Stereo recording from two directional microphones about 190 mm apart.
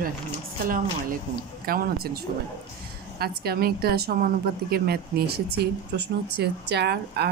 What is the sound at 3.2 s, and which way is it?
A woman's voice, 55° right (ahead or behind).